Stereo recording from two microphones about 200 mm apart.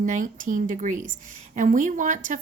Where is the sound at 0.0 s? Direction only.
40° right (ahead or behind).